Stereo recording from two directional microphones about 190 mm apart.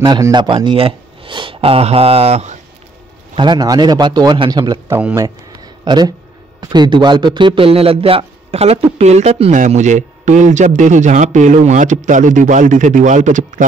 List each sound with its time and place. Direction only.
0.0 s speech: 25° right (ahead or behind)
3.3 s a man's voice: 20° right (ahead or behind); by 13.7 s 40° right (ahead or behind)